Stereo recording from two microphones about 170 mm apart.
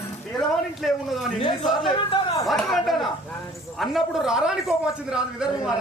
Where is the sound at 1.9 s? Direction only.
30° left (ahead or behind).